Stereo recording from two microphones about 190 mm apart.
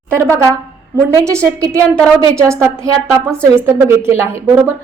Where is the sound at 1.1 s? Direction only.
15° right (ahead or behind).